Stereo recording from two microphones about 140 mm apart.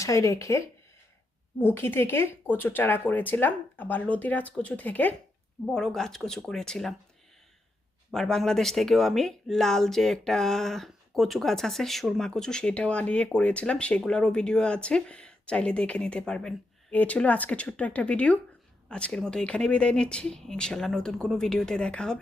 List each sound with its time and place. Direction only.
0.0 s speech: 20° left (ahead or behind)
1.6 s speech: 15° left (ahead or behind)
8.1 s speech: 5° left (ahead or behind)